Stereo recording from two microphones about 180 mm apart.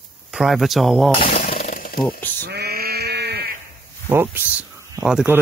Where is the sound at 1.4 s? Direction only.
40° left (ahead or behind).